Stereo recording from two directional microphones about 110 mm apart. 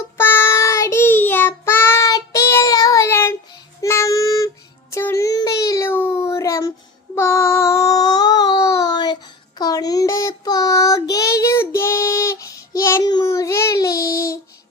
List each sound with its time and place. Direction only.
0.2 s child singing: 20° left (ahead or behind)
3.1 s child singing: 20° left (ahead or behind)
5.9 s a sound: 20° left (ahead or behind)
7.2 s child singing: 25° left (ahead or behind)